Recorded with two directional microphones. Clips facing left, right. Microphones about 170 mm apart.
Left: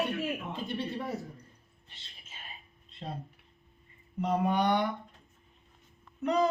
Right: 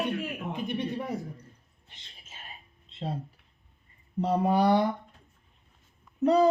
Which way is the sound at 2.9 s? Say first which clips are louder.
Right 7 dB; 25° right (ahead or behind).